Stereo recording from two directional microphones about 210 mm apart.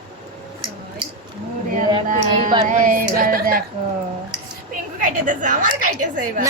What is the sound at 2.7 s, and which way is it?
Speech, 40° right (ahead or behind).